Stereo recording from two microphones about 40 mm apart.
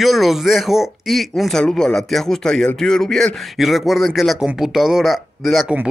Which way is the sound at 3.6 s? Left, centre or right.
Centre.